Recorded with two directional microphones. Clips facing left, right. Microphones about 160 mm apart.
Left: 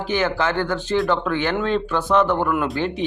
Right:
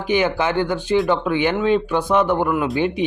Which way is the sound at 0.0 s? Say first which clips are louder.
Right 2 dB; 15° right (ahead or behind).